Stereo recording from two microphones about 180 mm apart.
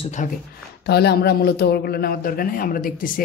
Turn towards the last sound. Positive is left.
turn(degrees=50)  # may be behind; listen again after turning